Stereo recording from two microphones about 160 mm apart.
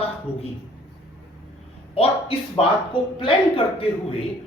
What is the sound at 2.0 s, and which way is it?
A woman's voice, 35° left (ahead or behind).